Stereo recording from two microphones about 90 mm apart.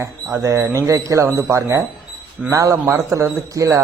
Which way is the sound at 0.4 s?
30° right (ahead or behind).